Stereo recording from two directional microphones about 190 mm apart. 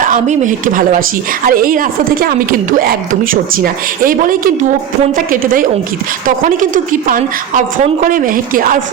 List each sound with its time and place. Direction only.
0.0 s a woman's voice: 40° right (ahead or behind)